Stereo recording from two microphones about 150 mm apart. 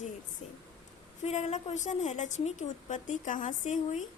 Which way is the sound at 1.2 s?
50° left (ahead or behind).